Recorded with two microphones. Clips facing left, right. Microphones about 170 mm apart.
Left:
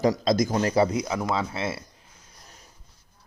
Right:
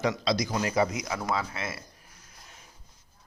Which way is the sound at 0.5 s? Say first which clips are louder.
Left 5 dB; 30° left (ahead or behind).